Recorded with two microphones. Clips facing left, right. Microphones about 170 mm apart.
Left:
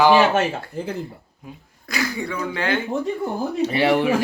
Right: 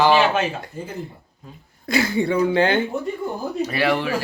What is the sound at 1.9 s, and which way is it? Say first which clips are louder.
Speech: right 6 dB; 25° right (ahead or behind).